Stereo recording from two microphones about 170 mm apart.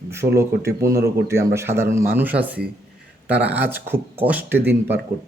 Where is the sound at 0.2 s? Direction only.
40° right (ahead or behind).